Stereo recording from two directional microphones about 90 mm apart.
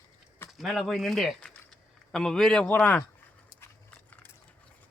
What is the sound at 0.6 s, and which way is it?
Speech, centre (ahead or behind).